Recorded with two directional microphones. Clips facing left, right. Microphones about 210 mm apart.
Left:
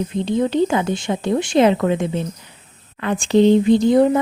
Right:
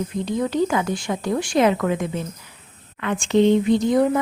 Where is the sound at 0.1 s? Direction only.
25° left (ahead or behind).